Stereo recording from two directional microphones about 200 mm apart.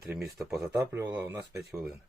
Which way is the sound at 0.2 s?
Centre (ahead or behind).